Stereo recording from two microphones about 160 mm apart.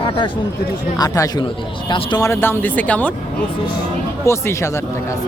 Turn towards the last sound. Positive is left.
turn(degrees=20)  # may be behind; listen again after turning